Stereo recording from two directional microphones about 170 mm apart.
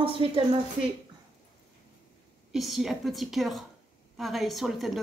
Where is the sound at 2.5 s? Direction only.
Centre (ahead or behind).